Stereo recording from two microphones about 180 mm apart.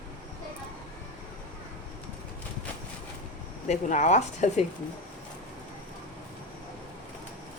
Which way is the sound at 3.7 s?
40° left (ahead or behind).